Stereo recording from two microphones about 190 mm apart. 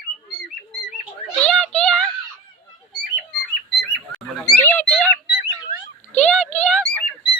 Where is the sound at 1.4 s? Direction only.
5° left (ahead or behind).